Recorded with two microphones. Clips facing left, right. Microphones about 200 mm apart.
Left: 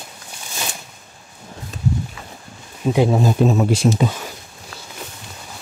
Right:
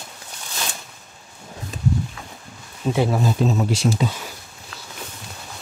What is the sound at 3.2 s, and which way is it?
Speech, 55° left (ahead or behind).